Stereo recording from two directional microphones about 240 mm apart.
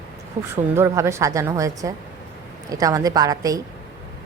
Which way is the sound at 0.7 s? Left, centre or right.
Centre.